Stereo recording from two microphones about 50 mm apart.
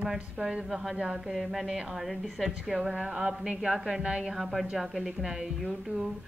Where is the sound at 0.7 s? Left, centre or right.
Centre.